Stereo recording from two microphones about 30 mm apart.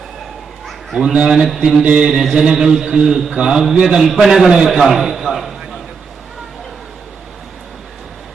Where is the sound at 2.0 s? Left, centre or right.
Centre.